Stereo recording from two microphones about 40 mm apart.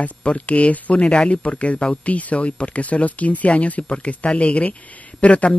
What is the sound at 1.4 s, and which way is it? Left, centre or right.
Speech, left.